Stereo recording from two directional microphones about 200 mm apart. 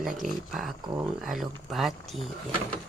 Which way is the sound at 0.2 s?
Centre (ahead or behind).